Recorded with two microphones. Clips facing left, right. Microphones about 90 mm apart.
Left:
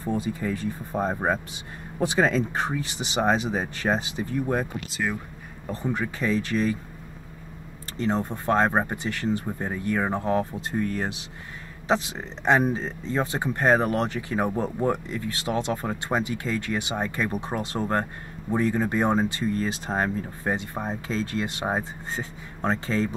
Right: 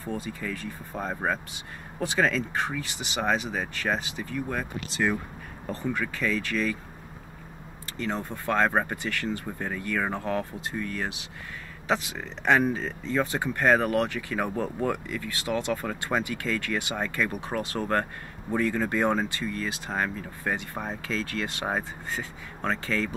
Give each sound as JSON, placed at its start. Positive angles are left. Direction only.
{"t": 0.0, "sound": "speech", "side_deg": 20}
{"t": 5.7, "sound": "speech", "side_deg": 20}
{"t": 8.0, "sound": "speech", "side_deg": 25}
{"t": 10.7, "sound": "speech", "side_deg": 35}